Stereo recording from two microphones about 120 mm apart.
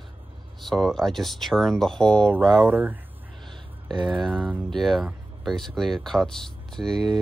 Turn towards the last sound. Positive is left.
turn(degrees=0)  # may be behind; listen again after turning